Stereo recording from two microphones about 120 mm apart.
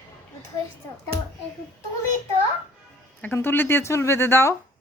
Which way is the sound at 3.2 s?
20° left (ahead or behind).